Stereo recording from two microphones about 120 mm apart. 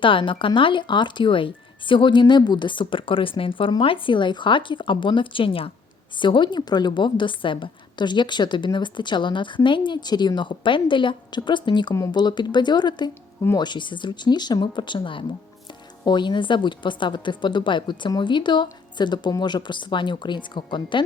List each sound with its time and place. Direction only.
0.0 s a woman's voice: 45° left (ahead or behind)